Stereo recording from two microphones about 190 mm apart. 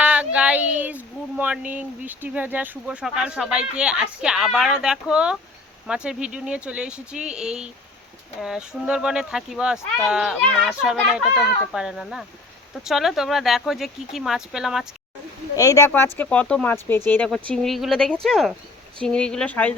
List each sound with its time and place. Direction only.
0.0 s speech: 5° right (ahead or behind)
15.5 s speech: 15° left (ahead or behind)